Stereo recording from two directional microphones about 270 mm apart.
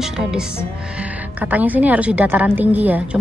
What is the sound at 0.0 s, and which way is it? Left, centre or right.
Music, centre.